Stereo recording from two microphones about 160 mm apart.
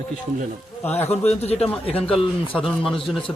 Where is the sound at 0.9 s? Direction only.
15° left (ahead or behind).